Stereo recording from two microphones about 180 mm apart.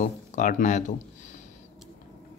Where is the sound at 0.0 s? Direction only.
45° left (ahead or behind).